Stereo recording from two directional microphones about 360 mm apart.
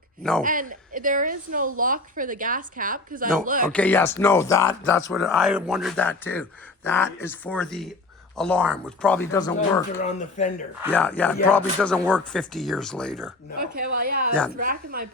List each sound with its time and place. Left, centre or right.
0.2 s speech: centre
0.4 s a woman's voice: right
3.7 s speech: centre
10.1 s speech: centre
10.8 s speech: centre
13.6 s a woman's voice: right
14.6 s a woman's voice: right